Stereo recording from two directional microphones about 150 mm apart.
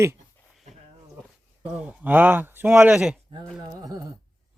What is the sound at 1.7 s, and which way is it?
Speech, 10° right (ahead or behind).